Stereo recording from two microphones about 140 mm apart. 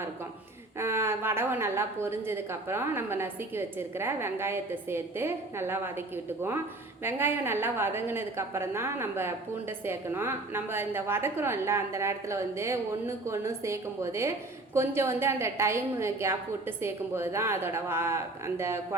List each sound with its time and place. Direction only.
0.8 s a woman's voice: 15° right (ahead or behind)